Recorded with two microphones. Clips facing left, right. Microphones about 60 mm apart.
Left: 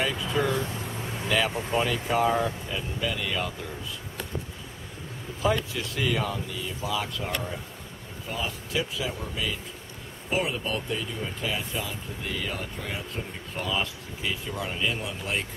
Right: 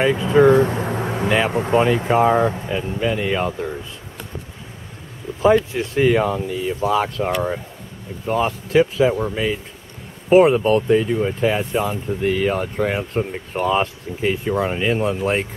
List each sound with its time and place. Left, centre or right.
0.0 s speech: right
0.7 s vehicle: right
1.5 s speech: right
2.0 s speech: right
5.4 s speech: right